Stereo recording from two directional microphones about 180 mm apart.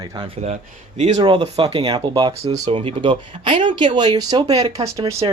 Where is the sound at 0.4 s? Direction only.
40° right (ahead or behind).